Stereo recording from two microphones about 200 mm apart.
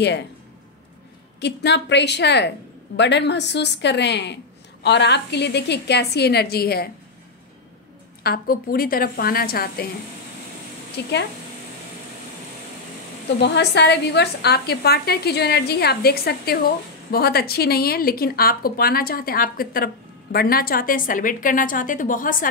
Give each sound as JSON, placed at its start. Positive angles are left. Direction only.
{"t": 1.4, "sound": "a woman's voice", "side_deg": 60}
{"t": 8.2, "sound": "a woman's voice", "side_deg": 50}
{"t": 11.0, "sound": "a woman's voice", "side_deg": 60}
{"t": 13.4, "sound": "a woman's voice", "side_deg": 60}